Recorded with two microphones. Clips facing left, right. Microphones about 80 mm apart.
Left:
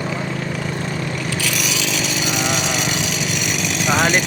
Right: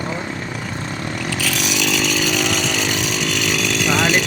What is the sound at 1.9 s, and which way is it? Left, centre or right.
Chainsaw, right.